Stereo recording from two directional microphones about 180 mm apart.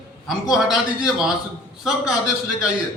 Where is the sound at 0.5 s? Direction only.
5° right (ahead or behind).